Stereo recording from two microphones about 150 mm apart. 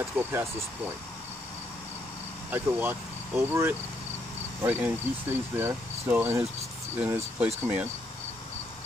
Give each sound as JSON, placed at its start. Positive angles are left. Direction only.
{"t": 0.0, "sound": "speech", "side_deg": -15}
{"t": 2.5, "sound": "speech", "side_deg": -15}